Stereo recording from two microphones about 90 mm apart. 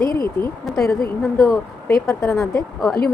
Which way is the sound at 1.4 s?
35° left (ahead or behind).